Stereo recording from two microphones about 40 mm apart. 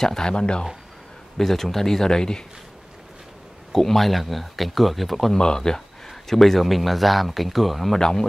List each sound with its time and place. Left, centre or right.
0.0 s speech: centre
0.3 s speech: left
1.4 s speech: centre
3.7 s speech: centre
5.3 s speech: centre
6.0 s speech: centre
8.0 s speech: centre